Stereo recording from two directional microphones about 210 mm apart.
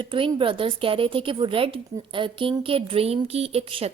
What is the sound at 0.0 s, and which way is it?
A woman's voice, 25° right (ahead or behind).